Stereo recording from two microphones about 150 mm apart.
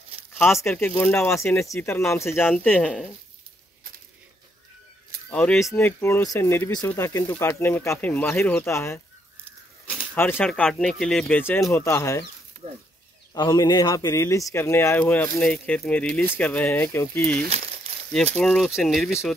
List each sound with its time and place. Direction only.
0.4 s speech: 15° left (ahead or behind)
5.3 s speech: 5° left (ahead or behind)
5.6 s speech: 20° left (ahead or behind)
10.1 s a man's voice: 15° left (ahead or behind)
12.6 s speech: 40° right (ahead or behind)
13.3 s a man's voice: 25° left (ahead or behind)
17.5 s a sound: 45° right (ahead or behind)
18.3 s speech: centre (ahead or behind)